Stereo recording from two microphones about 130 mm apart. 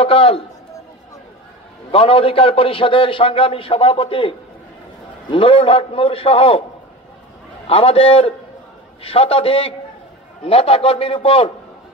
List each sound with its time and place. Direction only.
0.0 s a man's voice: 45° left (ahead or behind)
1.9 s a man's voice: 45° left (ahead or behind)
7.6 s a man's voice: 50° left (ahead or behind)